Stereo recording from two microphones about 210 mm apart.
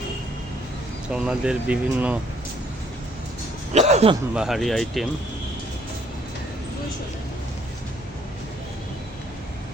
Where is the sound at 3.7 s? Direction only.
30° right (ahead or behind).